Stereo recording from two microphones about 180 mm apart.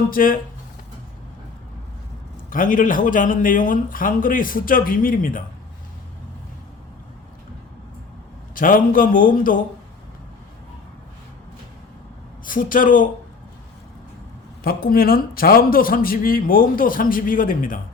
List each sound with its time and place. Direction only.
0.1 s a man's voice: 50° left (ahead or behind)
2.5 s a man's voice: 50° left (ahead or behind)
8.5 s a man's voice: 50° left (ahead or behind)
12.5 s a man's voice: 50° left (ahead or behind)
14.6 s a man's voice: 55° left (ahead or behind)